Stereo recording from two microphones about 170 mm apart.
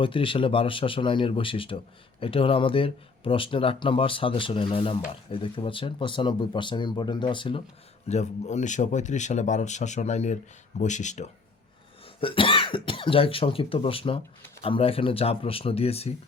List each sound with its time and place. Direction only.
0.0 s speech: 30° left (ahead or behind)
8.0 s a man's voice: 40° left (ahead or behind)
12.2 s speech: 30° left (ahead or behind)